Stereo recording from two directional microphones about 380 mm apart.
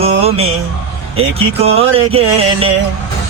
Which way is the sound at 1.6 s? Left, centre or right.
Centre.